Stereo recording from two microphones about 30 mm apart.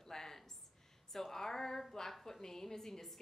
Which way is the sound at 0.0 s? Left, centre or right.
Centre.